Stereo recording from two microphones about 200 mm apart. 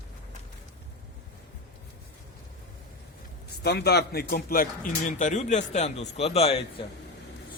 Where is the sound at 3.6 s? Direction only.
55° left (ahead or behind); by 6.8 s 30° left (ahead or behind).